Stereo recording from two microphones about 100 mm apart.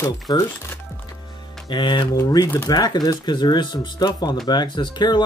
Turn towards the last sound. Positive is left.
turn(degrees=50)  # may be behind; listen again after turning